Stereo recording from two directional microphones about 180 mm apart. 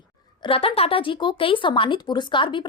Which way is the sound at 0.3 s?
30° left (ahead or behind).